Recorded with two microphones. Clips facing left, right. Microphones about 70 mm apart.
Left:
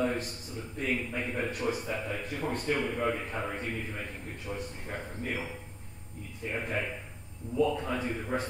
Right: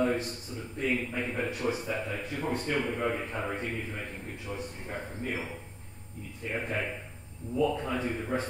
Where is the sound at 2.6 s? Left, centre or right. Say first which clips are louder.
Left 3 dB; right.